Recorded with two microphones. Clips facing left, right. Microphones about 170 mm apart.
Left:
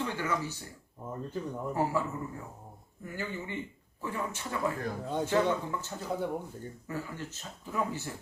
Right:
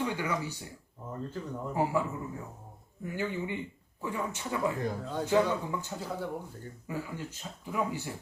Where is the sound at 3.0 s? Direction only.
15° right (ahead or behind).